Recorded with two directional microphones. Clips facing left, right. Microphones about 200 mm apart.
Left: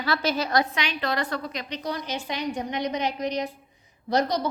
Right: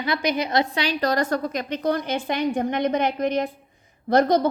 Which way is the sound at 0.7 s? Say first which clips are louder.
Right 5 dB; 35° right (ahead or behind).